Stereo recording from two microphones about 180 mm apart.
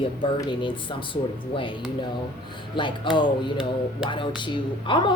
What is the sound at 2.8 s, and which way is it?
A woman's voice, 25° left (ahead or behind).